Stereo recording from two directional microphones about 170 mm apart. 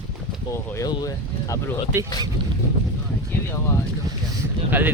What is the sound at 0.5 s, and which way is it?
Speech, 15° left (ahead or behind).